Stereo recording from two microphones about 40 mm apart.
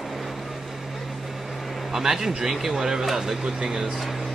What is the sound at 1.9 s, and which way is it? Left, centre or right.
Speech, centre.